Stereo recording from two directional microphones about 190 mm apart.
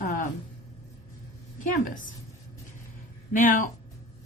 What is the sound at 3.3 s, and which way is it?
Speech, 45° left (ahead or behind).